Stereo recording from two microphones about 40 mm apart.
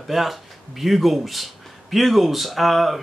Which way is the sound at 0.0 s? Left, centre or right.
Centre.